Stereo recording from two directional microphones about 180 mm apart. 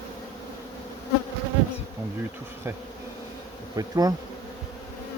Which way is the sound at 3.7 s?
20° right (ahead or behind).